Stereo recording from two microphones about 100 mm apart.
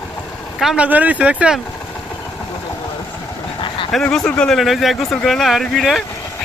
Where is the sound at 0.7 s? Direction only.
15° right (ahead or behind).